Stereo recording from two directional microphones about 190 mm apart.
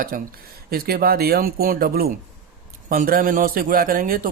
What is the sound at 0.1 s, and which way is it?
A man's voice, 50° right (ahead or behind).